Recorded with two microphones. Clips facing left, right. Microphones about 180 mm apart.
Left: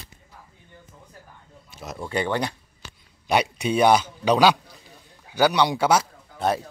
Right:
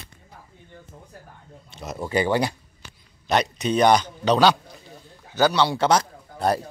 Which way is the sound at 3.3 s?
10° left (ahead or behind).